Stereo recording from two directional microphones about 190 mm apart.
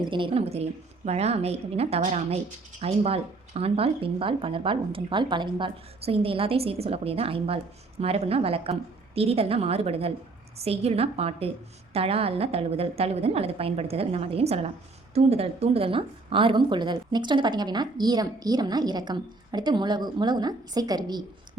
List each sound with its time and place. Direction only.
0.0 s a woman's voice: 25° right (ahead or behind)